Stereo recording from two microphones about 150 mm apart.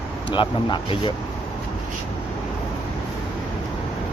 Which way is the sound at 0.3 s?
35° left (ahead or behind).